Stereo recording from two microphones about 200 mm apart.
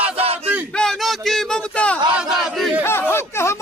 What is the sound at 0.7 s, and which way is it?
Speech, 5° left (ahead or behind).